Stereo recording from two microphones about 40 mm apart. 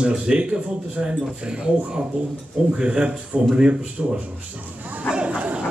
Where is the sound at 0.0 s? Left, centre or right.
Right.